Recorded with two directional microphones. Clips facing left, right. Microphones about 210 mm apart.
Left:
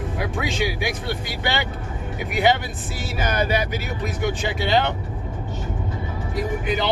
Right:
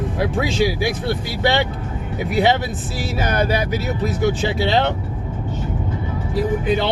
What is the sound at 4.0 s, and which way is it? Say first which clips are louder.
Speech: right 5 dB; 35° right (ahead or behind).